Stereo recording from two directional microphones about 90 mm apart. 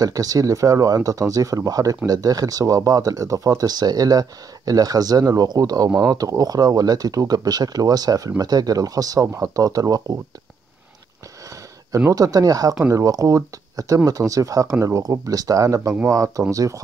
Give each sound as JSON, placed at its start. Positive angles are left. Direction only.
{"t": 0.0, "sound": "speech", "side_deg": -40}
{"t": 12.1, "sound": "speech", "side_deg": -40}